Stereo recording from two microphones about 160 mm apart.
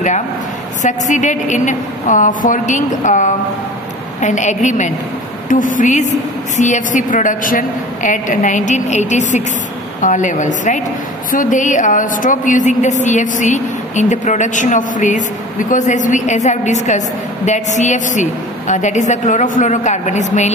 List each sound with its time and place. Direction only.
0.8 s a woman's voice: 50° left (ahead or behind)